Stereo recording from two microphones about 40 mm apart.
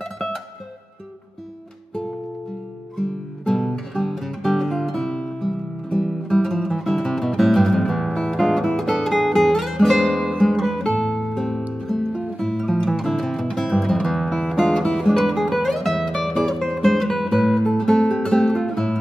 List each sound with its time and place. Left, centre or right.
0.0 s music: centre
3.0 s music: centre
11.1 s music: centre
12.1 s music: right
12.4 s music: centre
15.0 s music: centre